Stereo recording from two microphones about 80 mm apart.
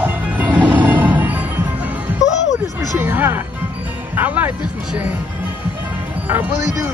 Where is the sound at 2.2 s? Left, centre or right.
Left.